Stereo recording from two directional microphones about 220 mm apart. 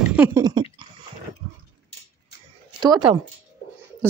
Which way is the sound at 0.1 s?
10° right (ahead or behind).